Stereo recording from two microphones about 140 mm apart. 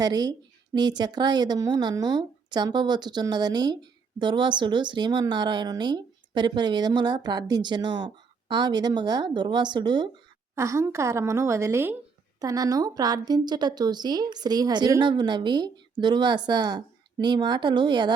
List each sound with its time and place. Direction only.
0.0 s a woman's voice: 30° right (ahead or behind)
10.5 s a woman's voice: 20° right (ahead or behind)